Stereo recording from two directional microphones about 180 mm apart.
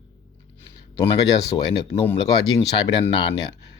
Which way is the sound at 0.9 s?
20° left (ahead or behind).